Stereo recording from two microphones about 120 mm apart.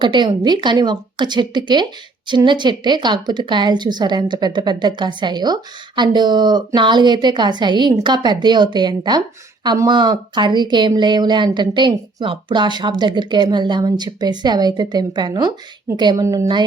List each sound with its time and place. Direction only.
0.0 s speech: 40° right (ahead or behind)
16.2 s a woman's voice: 25° right (ahead or behind)